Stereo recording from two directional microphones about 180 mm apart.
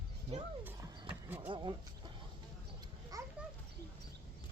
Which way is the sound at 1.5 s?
25° right (ahead or behind).